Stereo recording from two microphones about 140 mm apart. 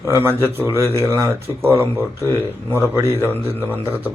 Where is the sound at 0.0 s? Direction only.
15° right (ahead or behind).